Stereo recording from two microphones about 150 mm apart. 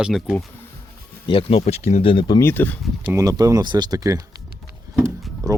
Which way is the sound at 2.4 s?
15° left (ahead or behind).